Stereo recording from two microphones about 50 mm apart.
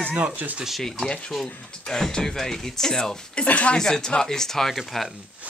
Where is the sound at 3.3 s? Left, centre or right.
Left.